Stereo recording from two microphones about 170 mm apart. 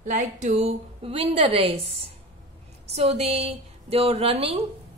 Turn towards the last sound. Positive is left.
turn(degrees=-35)  # may be behind; listen again after turning